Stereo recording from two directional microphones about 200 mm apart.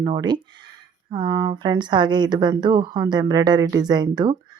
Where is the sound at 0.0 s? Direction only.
20° right (ahead or behind).